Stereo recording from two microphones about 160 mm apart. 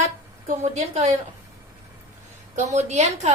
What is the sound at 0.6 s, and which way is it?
Speech, 45° right (ahead or behind).